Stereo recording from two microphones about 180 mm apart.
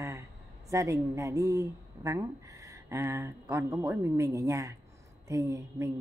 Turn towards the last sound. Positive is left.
turn(degrees=-15)  # may be behind; listen again after turning